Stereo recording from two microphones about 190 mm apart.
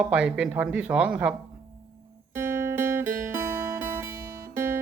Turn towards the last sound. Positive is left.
turn(degrees=-10)  # may be behind; listen again after turning